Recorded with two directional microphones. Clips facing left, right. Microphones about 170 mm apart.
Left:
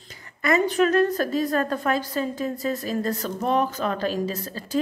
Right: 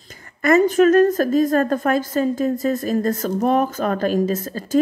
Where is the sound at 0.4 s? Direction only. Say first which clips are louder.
Right 6 dB; 45° right (ahead or behind).